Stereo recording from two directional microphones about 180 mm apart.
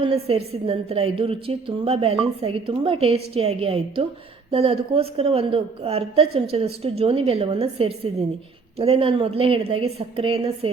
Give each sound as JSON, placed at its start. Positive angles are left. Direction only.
{"t": 0.0, "sound": "a woman's voice", "side_deg": -30}